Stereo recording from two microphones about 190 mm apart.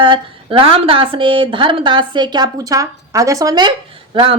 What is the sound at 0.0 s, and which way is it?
A woman's voice, 25° right (ahead or behind).